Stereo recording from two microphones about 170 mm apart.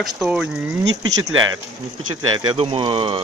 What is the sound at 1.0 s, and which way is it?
Speech, 20° right (ahead or behind).